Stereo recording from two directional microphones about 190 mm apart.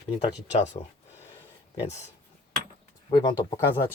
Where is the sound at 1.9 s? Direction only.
35° left (ahead or behind).